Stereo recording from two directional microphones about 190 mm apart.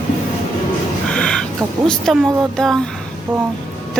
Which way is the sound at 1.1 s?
5° left (ahead or behind).